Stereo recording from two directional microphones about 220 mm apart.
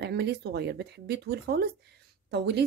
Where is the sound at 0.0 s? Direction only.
45° right (ahead or behind).